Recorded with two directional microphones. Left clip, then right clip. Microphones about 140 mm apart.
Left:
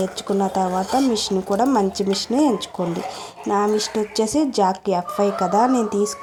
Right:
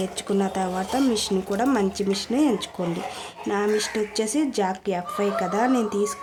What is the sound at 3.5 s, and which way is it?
Speech, 10° left (ahead or behind).